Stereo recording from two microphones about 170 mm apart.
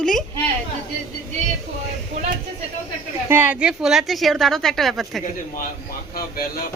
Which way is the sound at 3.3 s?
10° right (ahead or behind).